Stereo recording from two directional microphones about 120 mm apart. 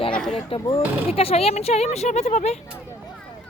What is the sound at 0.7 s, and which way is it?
Speech, 55° left (ahead or behind).